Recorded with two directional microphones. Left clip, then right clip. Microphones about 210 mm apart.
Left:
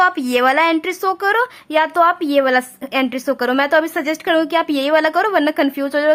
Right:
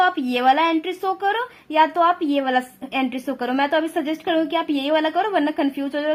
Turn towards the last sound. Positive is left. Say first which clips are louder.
# left 7 dB
turn(degrees=20)  # may be behind; listen again after turning